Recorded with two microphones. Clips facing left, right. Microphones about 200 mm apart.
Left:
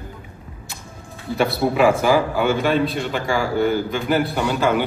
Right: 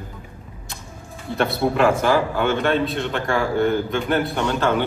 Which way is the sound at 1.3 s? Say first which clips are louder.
Left 1 dB; centre (ahead or behind).